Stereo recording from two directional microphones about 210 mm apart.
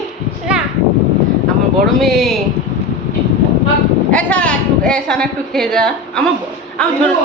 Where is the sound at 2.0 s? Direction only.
Centre (ahead or behind).